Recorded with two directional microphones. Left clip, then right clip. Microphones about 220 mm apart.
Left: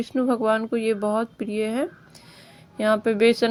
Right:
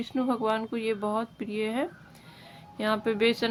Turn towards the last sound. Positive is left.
turn(degrees=25)  # may be behind; listen again after turning